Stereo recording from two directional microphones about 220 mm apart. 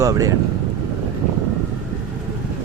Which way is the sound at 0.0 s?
15° right (ahead or behind).